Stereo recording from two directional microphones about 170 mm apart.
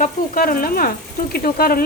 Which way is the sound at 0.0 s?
55° left (ahead or behind).